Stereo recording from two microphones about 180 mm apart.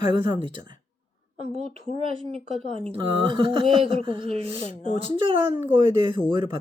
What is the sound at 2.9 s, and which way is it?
Speech, 30° right (ahead or behind).